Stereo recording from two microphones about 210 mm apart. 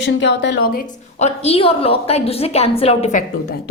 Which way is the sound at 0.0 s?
60° left (ahead or behind).